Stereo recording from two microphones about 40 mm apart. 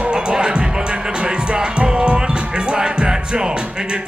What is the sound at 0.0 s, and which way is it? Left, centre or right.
Music, right.